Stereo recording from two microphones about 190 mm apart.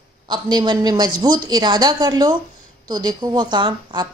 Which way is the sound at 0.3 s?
20° right (ahead or behind).